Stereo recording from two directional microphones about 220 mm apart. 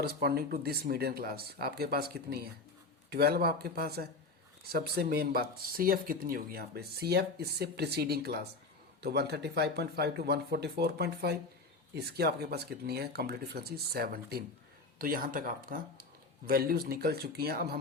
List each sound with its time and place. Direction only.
0.0 s speech: 45° right (ahead or behind)